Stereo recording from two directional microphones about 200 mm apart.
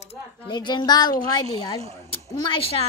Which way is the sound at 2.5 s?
30° left (ahead or behind).